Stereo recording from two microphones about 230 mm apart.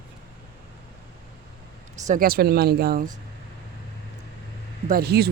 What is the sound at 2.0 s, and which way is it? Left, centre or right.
Speech, right.